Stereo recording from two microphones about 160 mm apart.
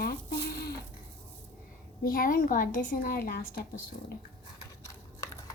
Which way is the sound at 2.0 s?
60° left (ahead or behind).